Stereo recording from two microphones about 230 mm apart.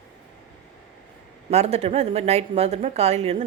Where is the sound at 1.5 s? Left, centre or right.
Right.